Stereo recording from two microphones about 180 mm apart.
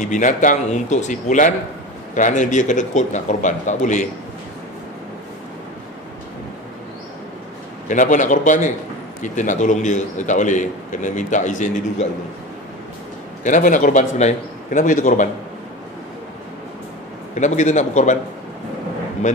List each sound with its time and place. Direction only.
0.0 s a man's voice: 45° left (ahead or behind)
7.9 s a man's voice: 45° left (ahead or behind)
13.4 s a man's voice: 45° left (ahead or behind)
17.4 s a man's voice: 40° left (ahead or behind)